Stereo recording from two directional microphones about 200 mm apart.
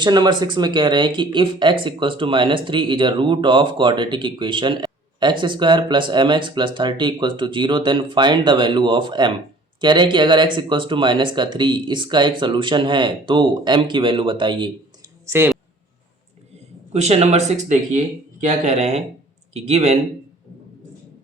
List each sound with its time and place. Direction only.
0.0 s speech: 20° right (ahead or behind)
15.3 s speech: 10° right (ahead or behind)
16.9 s speech: 30° right (ahead or behind)